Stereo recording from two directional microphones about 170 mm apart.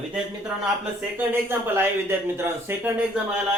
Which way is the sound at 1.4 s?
15° right (ahead or behind).